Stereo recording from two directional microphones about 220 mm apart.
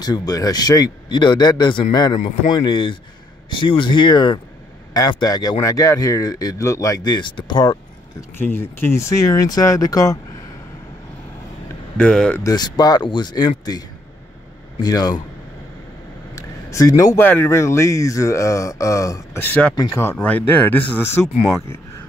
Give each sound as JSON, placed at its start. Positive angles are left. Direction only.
{"t": 0.0, "sound": "a man's voice", "side_deg": 15}
{"t": 8.4, "sound": "speech", "side_deg": 10}
{"t": 12.0, "sound": "speech", "side_deg": 5}
{"t": 12.4, "sound": "a man's voice", "side_deg": 20}
{"t": 16.3, "sound": "speech", "side_deg": 15}